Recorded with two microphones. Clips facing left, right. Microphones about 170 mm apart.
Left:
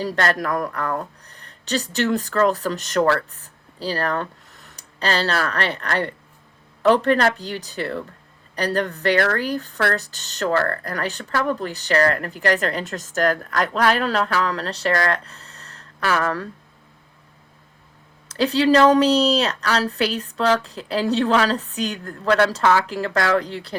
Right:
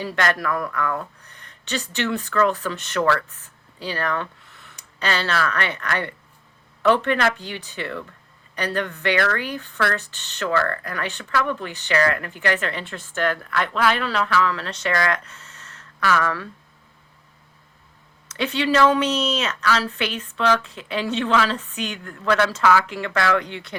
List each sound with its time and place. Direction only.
0.0 s speech: 35° left (ahead or behind)
18.3 s speech: 35° left (ahead or behind)